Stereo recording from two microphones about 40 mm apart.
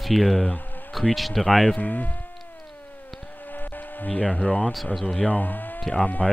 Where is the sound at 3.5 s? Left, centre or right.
Left.